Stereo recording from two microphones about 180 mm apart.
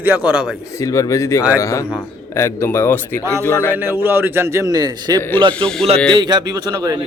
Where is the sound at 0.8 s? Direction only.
20° left (ahead or behind).